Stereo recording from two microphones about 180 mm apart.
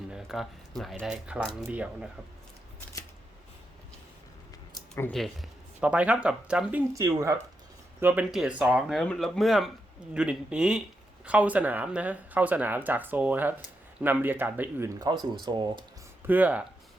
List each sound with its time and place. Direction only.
0.1 s speech: centre (ahead or behind)
4.7 s a sound: 15° left (ahead or behind)
5.1 s speech: centre (ahead or behind); by 7.3 s 15° right (ahead or behind)
8.0 s speech: 5° right (ahead or behind); by 15.8 s 25° right (ahead or behind)
16.2 s speech: 10° right (ahead or behind)